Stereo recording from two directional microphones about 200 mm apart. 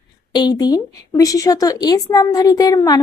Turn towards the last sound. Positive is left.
turn(degrees=20)  # may be behind; listen again after turning